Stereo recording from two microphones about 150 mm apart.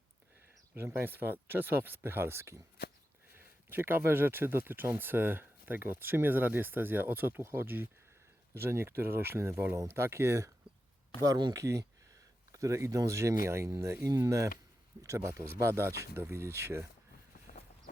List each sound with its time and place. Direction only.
0.7 s speech: 15° right (ahead or behind)